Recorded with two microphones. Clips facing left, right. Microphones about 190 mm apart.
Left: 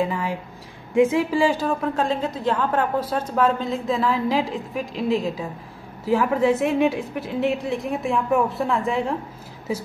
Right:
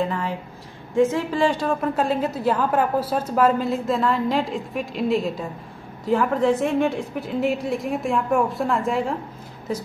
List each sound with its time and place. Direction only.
0.0 s a woman's voice: 10° left (ahead or behind)